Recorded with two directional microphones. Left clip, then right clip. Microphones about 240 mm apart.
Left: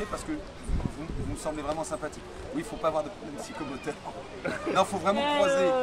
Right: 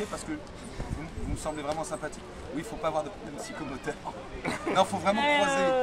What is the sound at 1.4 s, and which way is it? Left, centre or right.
Speech, centre.